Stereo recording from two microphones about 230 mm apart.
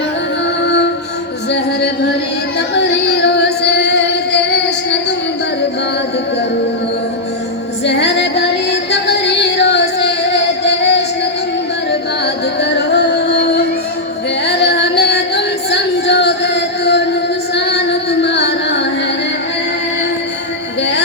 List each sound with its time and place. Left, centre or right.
0.6 s music: left
2.6 s singing: left
7.9 s music: left
17.5 s child singing: left